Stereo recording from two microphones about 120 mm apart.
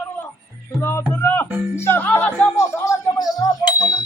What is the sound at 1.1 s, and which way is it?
Music, 15° left (ahead or behind).